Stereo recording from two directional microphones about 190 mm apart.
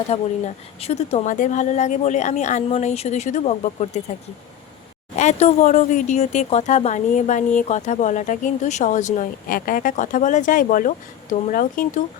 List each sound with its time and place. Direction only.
0.1 s speech: 35° left (ahead or behind)
5.1 s speech: 35° left (ahead or behind)